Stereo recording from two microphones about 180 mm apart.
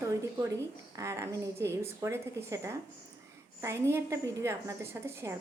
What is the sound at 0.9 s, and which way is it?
Speech, 15° right (ahead or behind).